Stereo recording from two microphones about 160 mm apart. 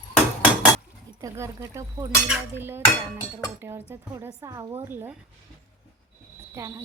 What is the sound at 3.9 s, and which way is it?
A woman's voice, 15° right (ahead or behind).